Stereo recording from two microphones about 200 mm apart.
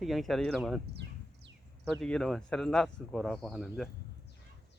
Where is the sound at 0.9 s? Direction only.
60° right (ahead or behind).